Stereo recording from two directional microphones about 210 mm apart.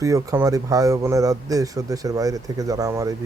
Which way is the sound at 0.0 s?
15° right (ahead or behind).